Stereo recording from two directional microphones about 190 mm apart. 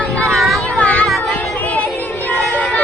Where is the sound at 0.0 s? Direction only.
5° left (ahead or behind).